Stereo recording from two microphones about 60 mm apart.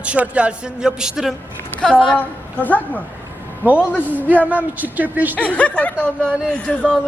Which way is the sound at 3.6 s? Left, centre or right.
Right.